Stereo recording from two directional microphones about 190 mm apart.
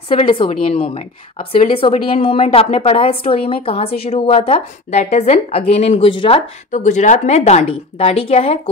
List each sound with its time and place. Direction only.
0.1 s a woman's voice: 25° left (ahead or behind)